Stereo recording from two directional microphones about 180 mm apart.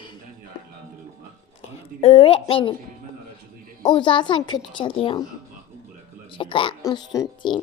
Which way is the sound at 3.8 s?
25° left (ahead or behind).